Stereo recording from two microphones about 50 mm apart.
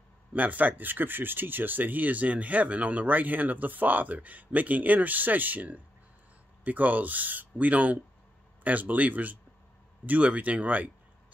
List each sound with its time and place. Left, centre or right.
0.3 s speech: right